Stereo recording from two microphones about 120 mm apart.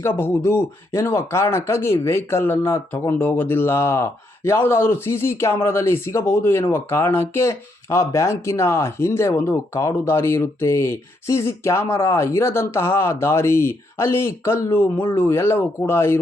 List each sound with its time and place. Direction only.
0.0 s speech: 20° left (ahead or behind)